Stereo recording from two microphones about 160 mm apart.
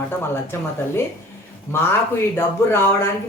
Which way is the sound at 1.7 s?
15° left (ahead or behind).